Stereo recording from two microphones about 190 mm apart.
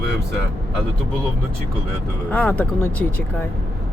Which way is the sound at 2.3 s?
10° left (ahead or behind).